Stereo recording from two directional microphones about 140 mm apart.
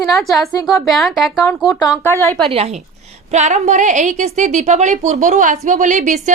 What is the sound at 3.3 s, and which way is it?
A woman's voice, 55° right (ahead or behind).